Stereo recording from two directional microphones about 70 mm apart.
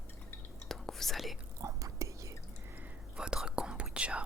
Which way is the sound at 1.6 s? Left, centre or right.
Right.